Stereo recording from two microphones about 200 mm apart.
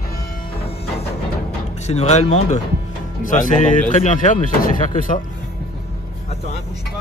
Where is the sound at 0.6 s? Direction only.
30° left (ahead or behind).